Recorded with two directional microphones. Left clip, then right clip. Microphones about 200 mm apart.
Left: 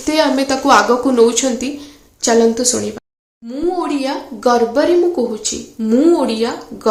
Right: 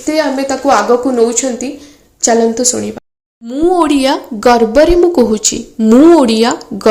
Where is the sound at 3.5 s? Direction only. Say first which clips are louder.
Right 8 dB; 35° right (ahead or behind).